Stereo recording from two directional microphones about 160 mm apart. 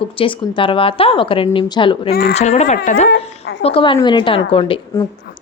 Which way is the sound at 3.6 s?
35° left (ahead or behind).